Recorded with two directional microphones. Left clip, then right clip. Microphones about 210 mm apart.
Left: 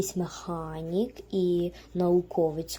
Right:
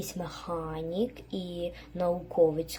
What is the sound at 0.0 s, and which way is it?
Speech, 50° left (ahead or behind).